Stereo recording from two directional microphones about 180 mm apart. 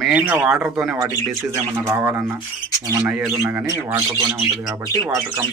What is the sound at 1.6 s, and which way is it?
Speech, 15° right (ahead or behind).